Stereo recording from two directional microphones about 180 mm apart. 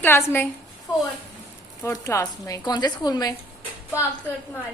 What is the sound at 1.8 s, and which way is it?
A woman's voice, 15° left (ahead or behind).